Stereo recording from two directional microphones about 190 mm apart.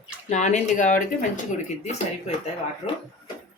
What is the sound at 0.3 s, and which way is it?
Speech, 40° left (ahead or behind).